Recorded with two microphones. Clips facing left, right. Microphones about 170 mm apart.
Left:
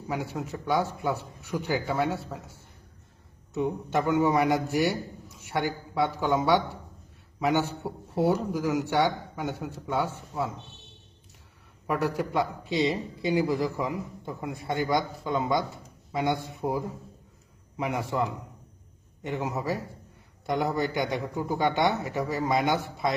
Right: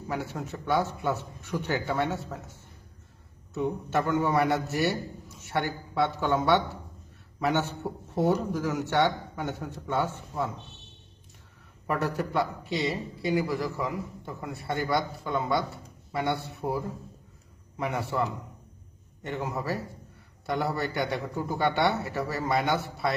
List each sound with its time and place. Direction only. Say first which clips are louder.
0.1 s a man's voice: left 1 dB; 10° left (ahead or behind)
11.9 s a man's voice: left 1 dB; 10° left (ahead or behind)